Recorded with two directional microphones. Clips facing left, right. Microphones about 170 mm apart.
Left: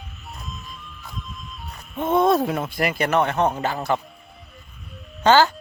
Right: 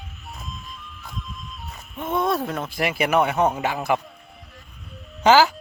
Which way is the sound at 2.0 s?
25° left (ahead or behind).